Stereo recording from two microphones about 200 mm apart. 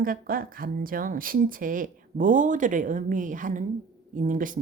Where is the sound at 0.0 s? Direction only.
45° right (ahead or behind).